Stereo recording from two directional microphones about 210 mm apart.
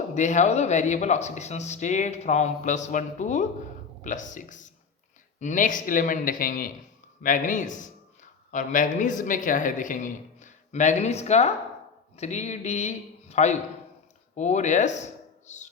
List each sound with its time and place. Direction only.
0.1 s a man's voice: 35° left (ahead or behind)